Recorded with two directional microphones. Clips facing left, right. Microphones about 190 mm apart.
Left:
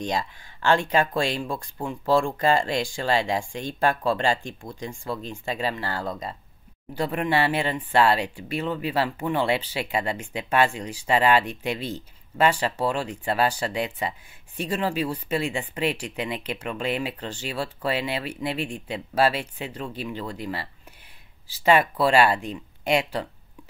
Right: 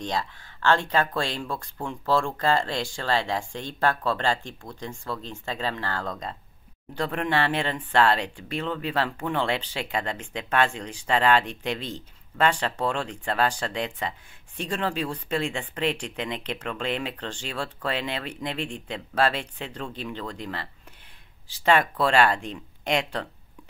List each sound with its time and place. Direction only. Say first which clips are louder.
0.0 s speech: left 2 dB; 15° left (ahead or behind)